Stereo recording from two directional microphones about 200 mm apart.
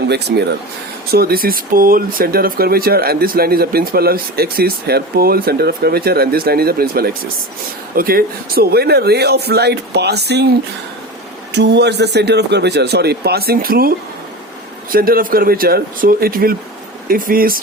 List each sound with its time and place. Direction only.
0.1 s speech: 55° right (ahead or behind)
11.5 s speech: 60° right (ahead or behind)